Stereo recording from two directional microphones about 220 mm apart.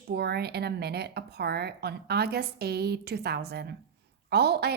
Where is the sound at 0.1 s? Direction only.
45° right (ahead or behind).